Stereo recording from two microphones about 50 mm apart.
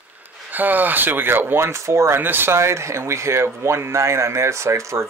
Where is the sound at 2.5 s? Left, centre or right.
Right.